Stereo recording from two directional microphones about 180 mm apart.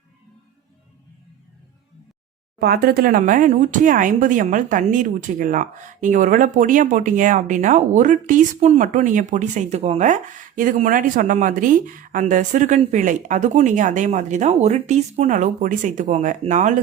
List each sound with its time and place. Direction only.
2.6 s speech: 60° right (ahead or behind); by 16.8 s 40° right (ahead or behind)